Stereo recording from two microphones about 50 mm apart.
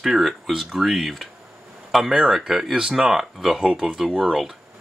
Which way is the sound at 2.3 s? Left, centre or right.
Centre.